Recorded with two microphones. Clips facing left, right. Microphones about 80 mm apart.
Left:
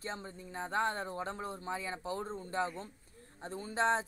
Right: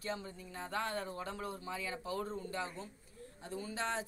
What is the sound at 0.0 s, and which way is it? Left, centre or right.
Speech, left.